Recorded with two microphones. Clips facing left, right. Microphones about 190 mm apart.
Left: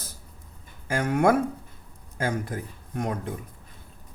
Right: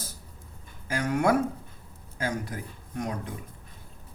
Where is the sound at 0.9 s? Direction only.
50° left (ahead or behind).